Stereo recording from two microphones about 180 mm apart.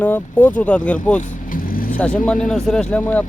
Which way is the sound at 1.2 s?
50° left (ahead or behind).